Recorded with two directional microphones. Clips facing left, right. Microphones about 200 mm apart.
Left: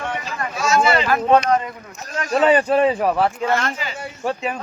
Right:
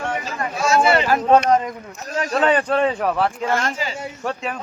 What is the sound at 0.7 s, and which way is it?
Speech, 40° right (ahead or behind).